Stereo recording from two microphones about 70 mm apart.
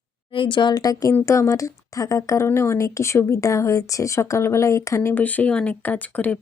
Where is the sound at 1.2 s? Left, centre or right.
Left.